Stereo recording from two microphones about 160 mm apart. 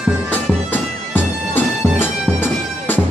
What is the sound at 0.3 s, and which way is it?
Bagpipes, 10° left (ahead or behind).